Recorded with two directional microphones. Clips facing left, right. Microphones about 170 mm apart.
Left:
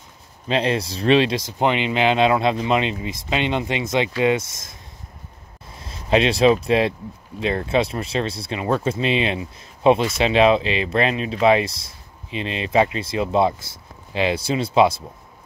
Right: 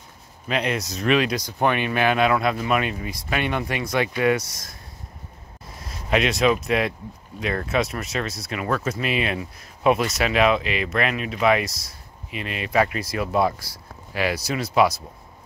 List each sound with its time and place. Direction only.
0.5 s speech: 30° left (ahead or behind)
5.9 s speech: 30° left (ahead or behind)